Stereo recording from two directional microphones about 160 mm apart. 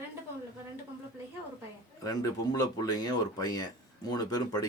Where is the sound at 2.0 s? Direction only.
20° left (ahead or behind).